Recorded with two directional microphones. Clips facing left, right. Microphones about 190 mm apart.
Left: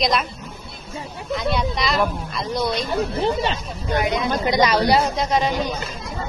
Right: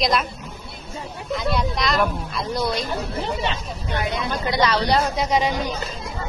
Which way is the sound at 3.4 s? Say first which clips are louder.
Left 2 dB; 40° left (ahead or behind).